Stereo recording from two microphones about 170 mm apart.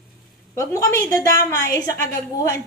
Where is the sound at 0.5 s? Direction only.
15° left (ahead or behind).